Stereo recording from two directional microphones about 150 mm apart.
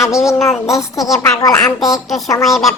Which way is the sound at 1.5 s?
5° left (ahead or behind).